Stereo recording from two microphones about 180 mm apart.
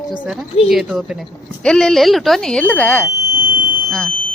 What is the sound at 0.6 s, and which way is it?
A woman's voice, centre (ahead or behind).